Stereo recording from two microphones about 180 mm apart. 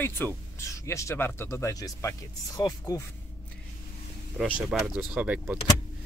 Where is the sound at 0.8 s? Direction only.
15° left (ahead or behind).